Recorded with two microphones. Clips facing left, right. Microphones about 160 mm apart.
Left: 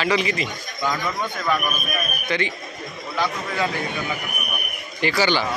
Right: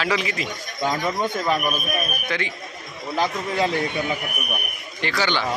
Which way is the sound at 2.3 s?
Centre (ahead or behind).